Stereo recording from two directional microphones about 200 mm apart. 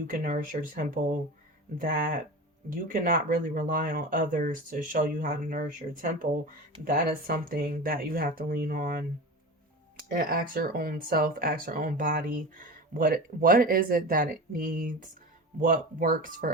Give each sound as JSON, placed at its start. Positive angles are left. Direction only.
{"t": 0.1, "sound": "speech", "side_deg": -40}
{"t": 10.1, "sound": "speech", "side_deg": -45}